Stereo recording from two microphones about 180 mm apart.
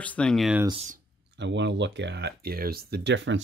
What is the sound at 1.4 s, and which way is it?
Speech, 80° right.